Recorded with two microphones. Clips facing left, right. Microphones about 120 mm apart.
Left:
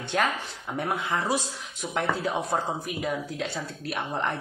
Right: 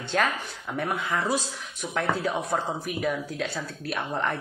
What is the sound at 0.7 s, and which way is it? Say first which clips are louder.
Speech: even; 25° left (ahead or behind).